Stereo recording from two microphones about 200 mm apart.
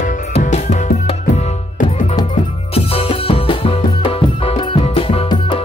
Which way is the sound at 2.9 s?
30° left (ahead or behind).